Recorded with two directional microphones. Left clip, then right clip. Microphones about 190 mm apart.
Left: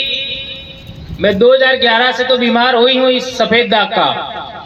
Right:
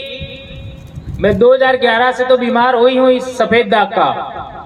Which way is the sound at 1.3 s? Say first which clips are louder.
Left 1 dB; 45° left (ahead or behind).